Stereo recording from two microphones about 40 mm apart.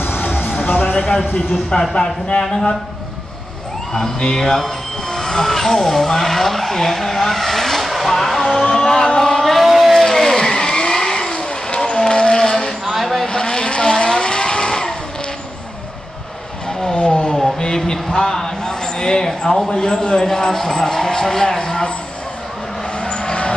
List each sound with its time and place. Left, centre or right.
0.0 s music: left
2.0 s speech: left
3.9 s speech: centre
8.7 s a sound: centre
10.0 s vehicle: centre
11.3 s vehicle: left
12.9 s vehicle: centre
13.3 s vehicle: centre
16.8 s vehicle: left
17.3 s a sound: centre
17.6 s a man's voice: centre
22.9 s vehicle: left